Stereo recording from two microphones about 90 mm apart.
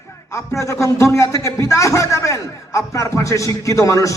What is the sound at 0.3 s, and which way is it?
A man's voice, 35° left (ahead or behind).